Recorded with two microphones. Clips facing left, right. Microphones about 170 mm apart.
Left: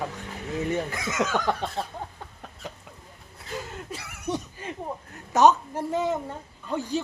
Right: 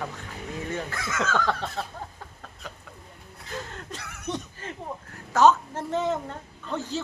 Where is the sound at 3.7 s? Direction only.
10° left (ahead or behind).